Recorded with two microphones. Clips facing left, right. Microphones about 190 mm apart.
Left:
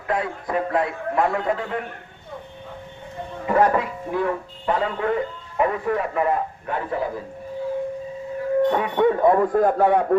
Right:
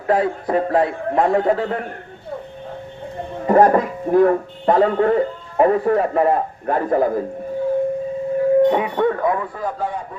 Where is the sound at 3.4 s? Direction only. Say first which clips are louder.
Right 6 dB; 40° right (ahead or behind).